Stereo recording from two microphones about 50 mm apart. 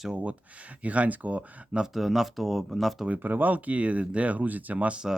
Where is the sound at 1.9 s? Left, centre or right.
Centre.